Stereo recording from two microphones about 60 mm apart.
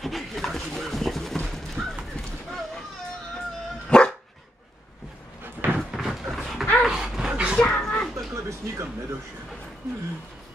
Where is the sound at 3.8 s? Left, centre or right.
Centre.